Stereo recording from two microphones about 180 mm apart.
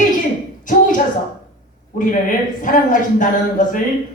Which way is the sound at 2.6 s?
45° left (ahead or behind).